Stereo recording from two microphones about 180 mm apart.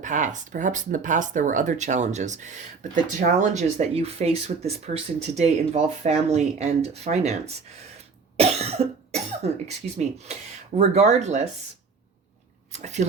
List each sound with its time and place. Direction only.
0.0 s speech: 45° right (ahead or behind)
10.8 s speech: 40° right (ahead or behind)
12.7 s speech: 40° right (ahead or behind)